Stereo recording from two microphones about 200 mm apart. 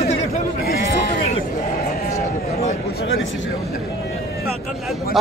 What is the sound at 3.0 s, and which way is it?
Speech, 75° left (ahead or behind).